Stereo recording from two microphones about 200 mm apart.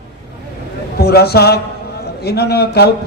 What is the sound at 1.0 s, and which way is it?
A man's voice, 50° left (ahead or behind).